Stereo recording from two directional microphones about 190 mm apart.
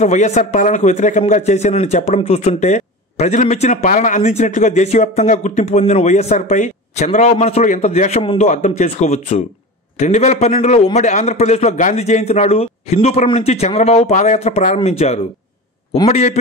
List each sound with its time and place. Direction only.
0.0 s a man's voice: 40° left (ahead or behind)